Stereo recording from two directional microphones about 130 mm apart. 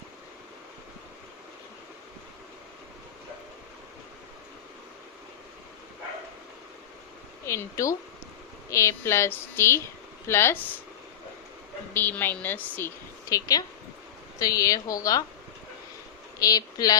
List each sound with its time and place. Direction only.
7.4 s speech: 20° left (ahead or behind)
11.9 s speech: 15° left (ahead or behind)
13.2 s a woman's voice: 25° left (ahead or behind)
16.4 s speech: 25° left (ahead or behind)